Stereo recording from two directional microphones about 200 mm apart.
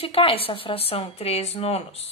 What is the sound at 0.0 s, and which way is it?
A woman's voice, 25° left (ahead or behind).